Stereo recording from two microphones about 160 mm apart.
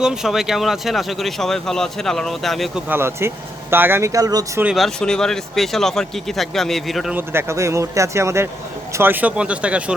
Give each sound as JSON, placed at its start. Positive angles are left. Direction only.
{"t": 0.0, "sound": "speech", "side_deg": -5}
{"t": 2.9, "sound": "speech", "side_deg": -15}
{"t": 4.6, "sound": "speech", "side_deg": 0}
{"t": 7.2, "sound": "speech", "side_deg": -15}